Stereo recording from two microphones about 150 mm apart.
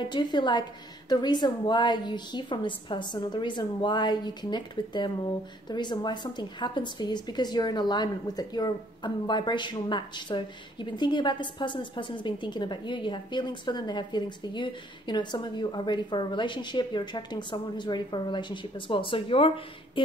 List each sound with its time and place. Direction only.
0.0 s a woman's voice: 30° left (ahead or behind)